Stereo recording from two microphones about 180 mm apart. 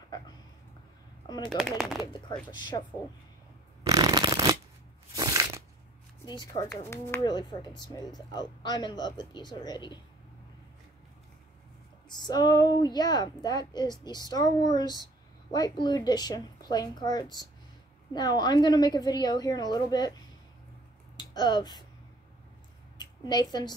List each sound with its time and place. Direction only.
1.2 s speech: 25° left (ahead or behind)
1.6 s speech: centre (ahead or behind)
2.1 s speech: 25° left (ahead or behind)
3.8 s shuffling cards: 20° right (ahead or behind)
5.1 s a sound: 20° right (ahead or behind)
6.2 s speech: 25° left (ahead or behind)
6.9 s speech: 15° left (ahead or behind)
7.3 s speech: 25° left (ahead or behind)
12.1 s speech: 25° left (ahead or behind)
21.2 s speech: 25° left (ahead or behind)
22.9 s a sound: 25° left (ahead or behind)